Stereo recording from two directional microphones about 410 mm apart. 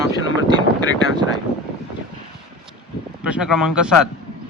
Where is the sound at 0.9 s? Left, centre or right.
Left.